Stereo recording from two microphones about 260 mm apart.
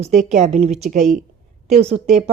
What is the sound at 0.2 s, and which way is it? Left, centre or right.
Speech, right.